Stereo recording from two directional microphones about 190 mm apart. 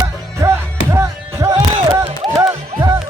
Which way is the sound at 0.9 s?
15° right (ahead or behind).